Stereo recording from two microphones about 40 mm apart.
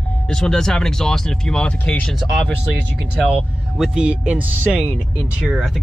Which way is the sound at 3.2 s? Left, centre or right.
Right.